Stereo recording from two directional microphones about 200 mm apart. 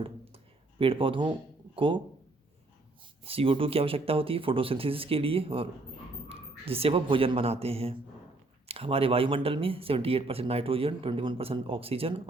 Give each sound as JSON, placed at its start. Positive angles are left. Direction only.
{"t": 0.8, "sound": "speech", "side_deg": -25}
{"t": 3.2, "sound": "speech", "side_deg": -30}